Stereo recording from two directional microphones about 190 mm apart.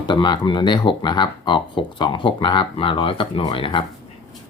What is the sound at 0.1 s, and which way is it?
Speech, 25° left (ahead or behind).